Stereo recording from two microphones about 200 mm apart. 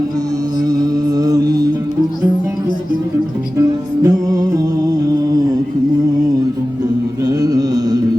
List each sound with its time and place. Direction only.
0.7 s music: 20° right (ahead or behind)
3.6 s music: 15° right (ahead or behind)
7.3 s music: 20° right (ahead or behind)